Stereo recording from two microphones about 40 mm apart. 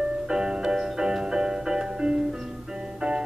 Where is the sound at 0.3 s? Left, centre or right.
Centre.